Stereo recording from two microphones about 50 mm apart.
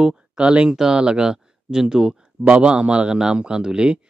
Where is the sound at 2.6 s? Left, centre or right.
Right.